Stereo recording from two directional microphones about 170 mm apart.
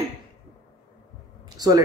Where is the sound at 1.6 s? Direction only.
25° right (ahead or behind).